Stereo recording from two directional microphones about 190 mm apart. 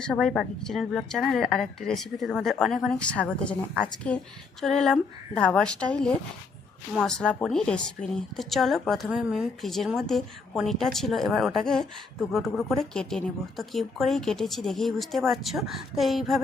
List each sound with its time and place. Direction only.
0.1 s a woman's voice: centre (ahead or behind)
4.6 s a woman's voice: centre (ahead or behind)